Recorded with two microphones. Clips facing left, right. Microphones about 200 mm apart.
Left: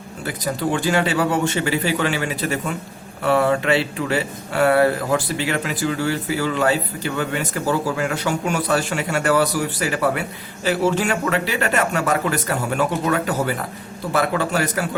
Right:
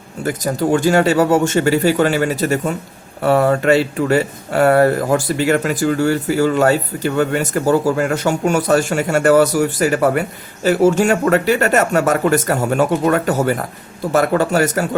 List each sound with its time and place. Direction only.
0.3 s speech: 45° right (ahead or behind)